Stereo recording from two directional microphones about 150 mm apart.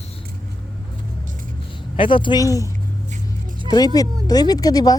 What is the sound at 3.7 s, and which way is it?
Speech, 25° left (ahead or behind).